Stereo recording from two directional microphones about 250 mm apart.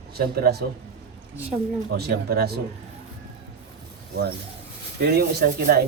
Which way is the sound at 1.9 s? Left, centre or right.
Right.